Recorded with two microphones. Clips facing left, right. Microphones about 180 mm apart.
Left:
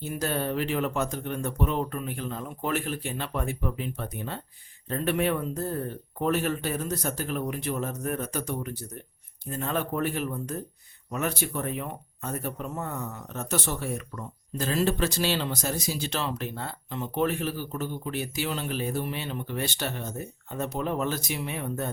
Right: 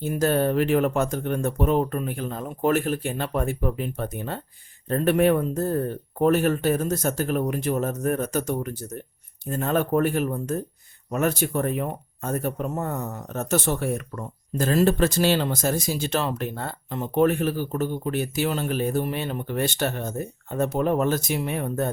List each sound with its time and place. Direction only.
0.0 s speech: 50° right (ahead or behind)